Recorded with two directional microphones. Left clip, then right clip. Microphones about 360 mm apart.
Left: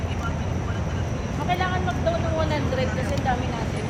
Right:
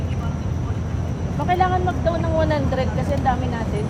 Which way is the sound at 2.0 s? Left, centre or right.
Right.